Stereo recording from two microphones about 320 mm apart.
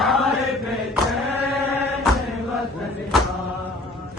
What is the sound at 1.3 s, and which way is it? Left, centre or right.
Chant, right.